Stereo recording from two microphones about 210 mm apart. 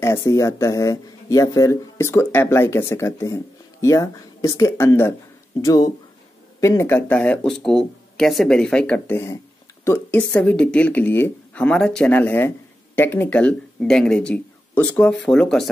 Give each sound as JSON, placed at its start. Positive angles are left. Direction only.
{"t": 0.0, "sound": "speech", "side_deg": 15}